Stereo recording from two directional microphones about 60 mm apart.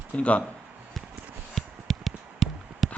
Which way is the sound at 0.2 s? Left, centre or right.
Left.